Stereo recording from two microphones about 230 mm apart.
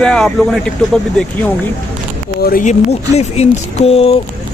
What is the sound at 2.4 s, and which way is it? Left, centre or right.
Speech, left.